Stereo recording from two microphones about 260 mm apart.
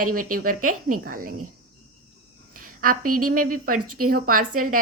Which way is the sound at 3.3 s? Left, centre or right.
Right.